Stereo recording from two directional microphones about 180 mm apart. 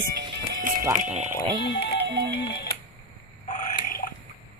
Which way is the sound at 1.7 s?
70° left (ahead or behind).